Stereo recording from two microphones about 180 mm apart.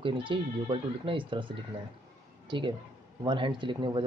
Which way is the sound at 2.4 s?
25° right (ahead or behind).